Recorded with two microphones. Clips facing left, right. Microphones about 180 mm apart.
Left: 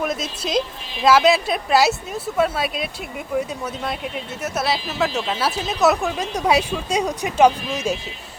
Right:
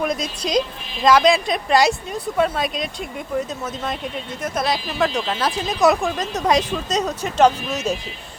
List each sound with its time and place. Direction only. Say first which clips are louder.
0.0 s speech: right 1 dB; 5° left (ahead or behind)
4.4 s speech: right 1 dB; 5° left (ahead or behind)